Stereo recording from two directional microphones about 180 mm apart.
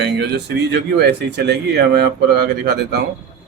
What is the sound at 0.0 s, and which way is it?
A man's voice, 70° right (ahead or behind).